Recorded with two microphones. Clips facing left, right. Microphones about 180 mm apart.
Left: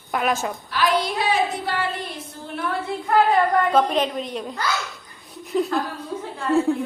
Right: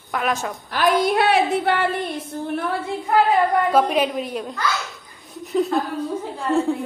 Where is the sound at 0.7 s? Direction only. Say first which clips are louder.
Right 4 dB; 50° right (ahead or behind).